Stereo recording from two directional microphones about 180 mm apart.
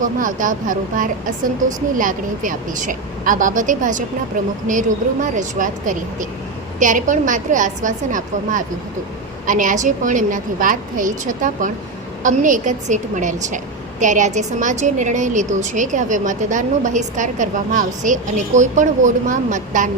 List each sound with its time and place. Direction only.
0.0 s a woman's voice: 45° right (ahead or behind)